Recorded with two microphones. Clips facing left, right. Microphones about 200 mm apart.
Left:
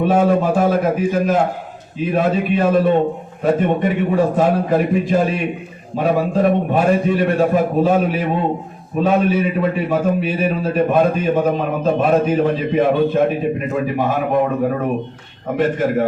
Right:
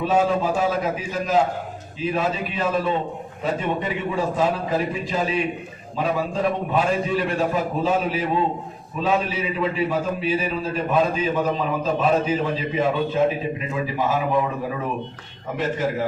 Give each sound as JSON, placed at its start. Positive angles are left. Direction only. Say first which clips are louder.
{"t": 0.0, "sound": "a man's voice", "louder": "left 5 dB", "side_deg": 55}